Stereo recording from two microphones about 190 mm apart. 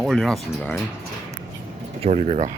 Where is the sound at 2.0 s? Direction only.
35° right (ahead or behind).